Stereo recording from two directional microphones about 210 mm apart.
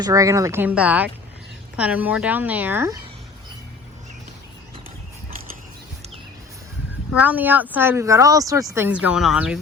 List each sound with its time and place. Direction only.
0.0 s speech: 15° right (ahead or behind)
7.2 s a woman's voice: 5° right (ahead or behind)